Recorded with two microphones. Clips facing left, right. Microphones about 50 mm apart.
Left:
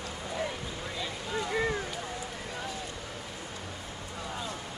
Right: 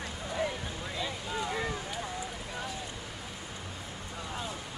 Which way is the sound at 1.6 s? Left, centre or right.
Left.